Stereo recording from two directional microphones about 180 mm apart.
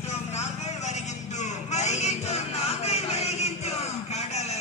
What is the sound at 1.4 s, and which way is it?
Vehicle, 40° left (ahead or behind).